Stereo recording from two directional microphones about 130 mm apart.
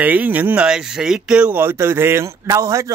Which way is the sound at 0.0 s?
10° right (ahead or behind).